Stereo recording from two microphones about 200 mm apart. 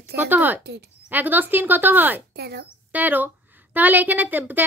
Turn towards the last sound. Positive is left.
turn(degrees=-10)  # may be behind; listen again after turning